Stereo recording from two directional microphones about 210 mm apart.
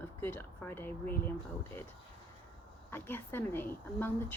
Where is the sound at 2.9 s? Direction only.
10° left (ahead or behind).